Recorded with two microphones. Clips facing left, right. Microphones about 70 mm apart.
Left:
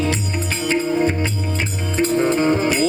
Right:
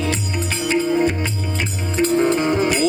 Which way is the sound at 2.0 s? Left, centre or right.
Left.